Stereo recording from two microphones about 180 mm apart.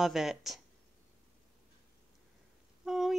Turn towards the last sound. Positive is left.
turn(degrees=0)  # may be behind; listen again after turning